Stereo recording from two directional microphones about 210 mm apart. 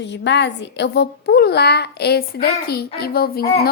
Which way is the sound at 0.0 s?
55° left (ahead or behind).